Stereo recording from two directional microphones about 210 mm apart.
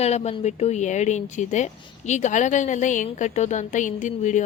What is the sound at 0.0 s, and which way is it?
A woman's voice, 30° left (ahead or behind).